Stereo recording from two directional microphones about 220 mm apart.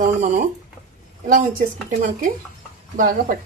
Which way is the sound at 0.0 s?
35° right (ahead or behind).